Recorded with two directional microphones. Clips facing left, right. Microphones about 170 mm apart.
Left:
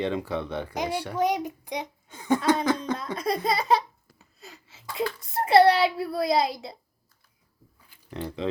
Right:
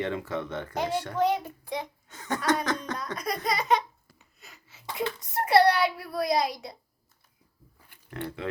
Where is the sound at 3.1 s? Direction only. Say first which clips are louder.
Left 3 dB; 25° left (ahead or behind).